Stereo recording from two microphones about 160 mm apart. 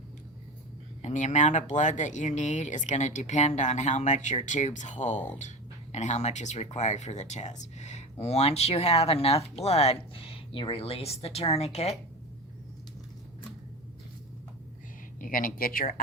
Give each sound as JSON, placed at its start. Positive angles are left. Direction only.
{"t": 1.0, "sound": "speech", "side_deg": 45}
{"t": 15.2, "sound": "speech", "side_deg": 60}